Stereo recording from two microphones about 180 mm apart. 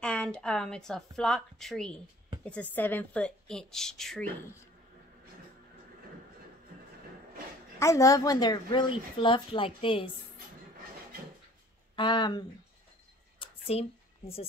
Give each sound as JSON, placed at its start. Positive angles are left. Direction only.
{"t": 0.0, "sound": "a woman's voice", "side_deg": 5}
{"t": 7.8, "sound": "a woman's voice", "side_deg": 20}
{"t": 11.9, "sound": "speech", "side_deg": 25}
{"t": 13.4, "sound": "a sound", "side_deg": 35}